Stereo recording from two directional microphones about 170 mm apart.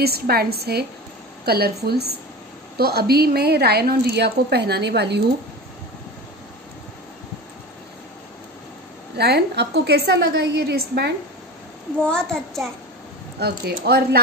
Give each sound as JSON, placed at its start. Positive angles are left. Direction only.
{"t": 0.0, "sound": "a woman's voice", "side_deg": -65}
{"t": 9.1, "sound": "a woman's voice", "side_deg": -75}
{"t": 12.0, "sound": "a child's voice", "side_deg": 5}
{"t": 13.4, "sound": "speech", "side_deg": -65}